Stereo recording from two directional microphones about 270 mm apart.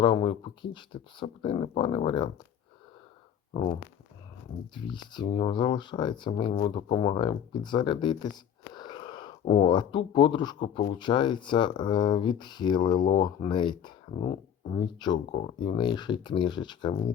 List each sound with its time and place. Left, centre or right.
0.0 s speech: centre
4.7 s speech: centre